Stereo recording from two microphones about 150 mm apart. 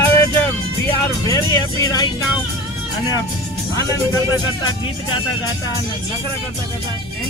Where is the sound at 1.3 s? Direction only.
25° left (ahead or behind).